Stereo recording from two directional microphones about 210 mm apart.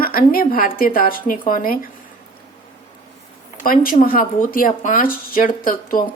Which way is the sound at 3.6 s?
45° left (ahead or behind).